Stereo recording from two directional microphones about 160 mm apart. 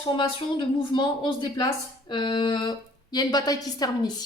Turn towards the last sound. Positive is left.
turn(degrees=25)  # may be behind; listen again after turning